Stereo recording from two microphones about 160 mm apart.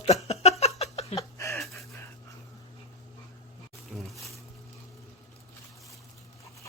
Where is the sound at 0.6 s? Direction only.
40° left (ahead or behind).